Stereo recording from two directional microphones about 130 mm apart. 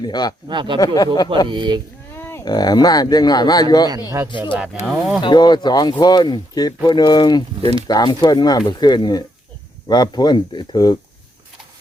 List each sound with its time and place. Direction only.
0.0 s speech: 35° left (ahead or behind)
0.4 s speech: 35° right (ahead or behind)
0.8 s speech: 30° left (ahead or behind)
1.5 s speech: 35° right (ahead or behind)
2.1 s a sound: 20° left (ahead or behind)
2.4 s speech: 30° left (ahead or behind)
4.9 s speech: centre (ahead or behind)
5.2 s speech: 35° left (ahead or behind)
7.6 s speech: 50° right (ahead or behind)
7.9 s speech: 30° left (ahead or behind)